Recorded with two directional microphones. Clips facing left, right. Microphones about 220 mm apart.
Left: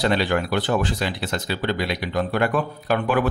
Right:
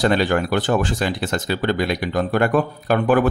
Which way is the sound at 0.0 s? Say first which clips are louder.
Right 3 dB; 45° right (ahead or behind).